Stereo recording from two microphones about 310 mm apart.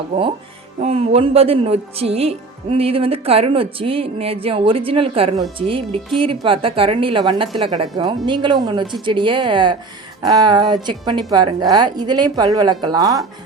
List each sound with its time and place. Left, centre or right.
0.8 s a woman's voice: centre